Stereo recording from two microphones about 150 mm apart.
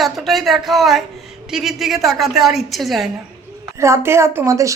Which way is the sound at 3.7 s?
20° right (ahead or behind).